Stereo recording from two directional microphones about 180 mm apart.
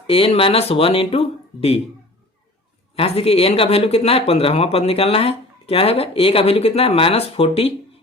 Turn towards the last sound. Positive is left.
turn(degrees=35)  # may be behind; listen again after turning